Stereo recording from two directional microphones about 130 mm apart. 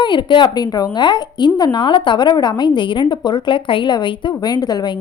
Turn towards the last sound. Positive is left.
turn(degrees=30)  # may be behind; listen again after turning